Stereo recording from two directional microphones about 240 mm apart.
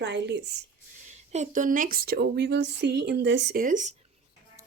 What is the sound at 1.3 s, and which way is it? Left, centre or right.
Speech, right.